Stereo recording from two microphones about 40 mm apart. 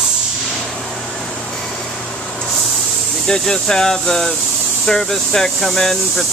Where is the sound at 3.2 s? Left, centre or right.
Centre.